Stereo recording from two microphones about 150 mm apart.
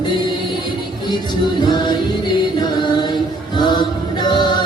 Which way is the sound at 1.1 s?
30° left (ahead or behind).